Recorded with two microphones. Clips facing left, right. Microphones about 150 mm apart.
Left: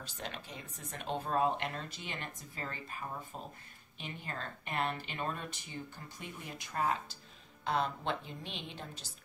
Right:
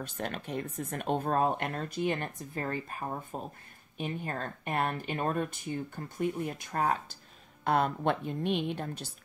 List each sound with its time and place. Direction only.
0.0 s speech: 55° right (ahead or behind)